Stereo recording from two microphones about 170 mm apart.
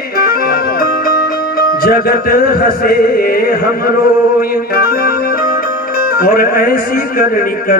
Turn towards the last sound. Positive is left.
turn(degrees=60)  # may be behind; listen again after turning